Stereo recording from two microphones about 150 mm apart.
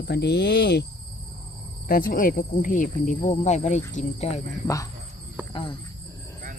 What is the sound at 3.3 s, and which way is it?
Speech, 50° left (ahead or behind).